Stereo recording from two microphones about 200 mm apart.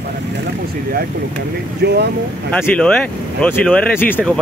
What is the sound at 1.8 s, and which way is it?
Speech, 55° right (ahead or behind).